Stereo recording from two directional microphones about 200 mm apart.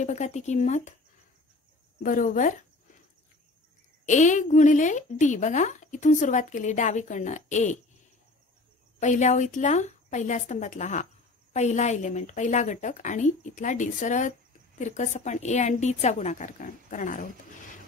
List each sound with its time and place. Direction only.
0.0 s speech: 35° left (ahead or behind)
2.0 s speech: 40° left (ahead or behind)
4.0 s speech: 35° left (ahead or behind)
9.0 s speech: 35° left (ahead or behind)